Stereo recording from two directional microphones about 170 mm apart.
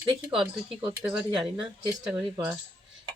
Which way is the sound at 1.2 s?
5° right (ahead or behind).